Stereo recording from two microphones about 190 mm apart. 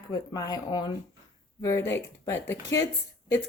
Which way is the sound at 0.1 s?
20° left (ahead or behind).